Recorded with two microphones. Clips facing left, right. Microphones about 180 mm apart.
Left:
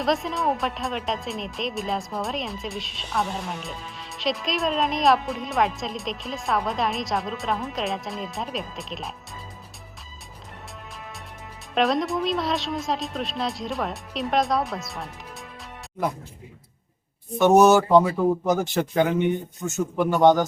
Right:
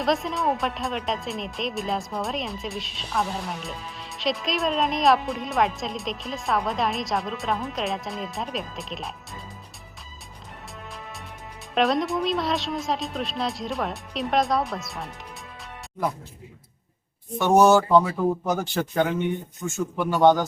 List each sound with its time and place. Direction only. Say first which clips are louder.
0.0 s speech: even; centre (ahead or behind)
11.7 s speech: even; centre (ahead or behind)
17.6 s a man's voice: right 1 dB; 5° left (ahead or behind)